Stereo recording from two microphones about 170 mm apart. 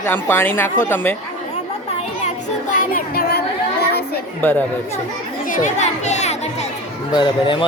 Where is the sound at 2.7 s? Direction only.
60° left (ahead or behind).